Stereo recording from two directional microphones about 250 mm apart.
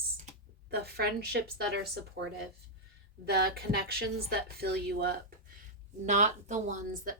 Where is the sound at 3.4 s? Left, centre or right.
Right.